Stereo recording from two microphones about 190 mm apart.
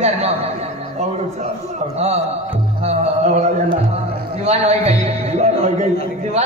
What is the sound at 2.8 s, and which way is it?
A man's voice, 35° right (ahead or behind).